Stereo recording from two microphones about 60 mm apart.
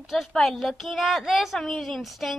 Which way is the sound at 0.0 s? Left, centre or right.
Centre.